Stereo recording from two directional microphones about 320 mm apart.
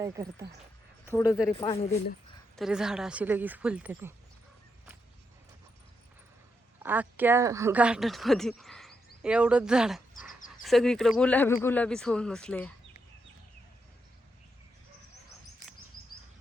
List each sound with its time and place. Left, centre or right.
0.0 s speech: centre
1.0 s speech: centre
2.6 s speech: centre
6.8 s speech: centre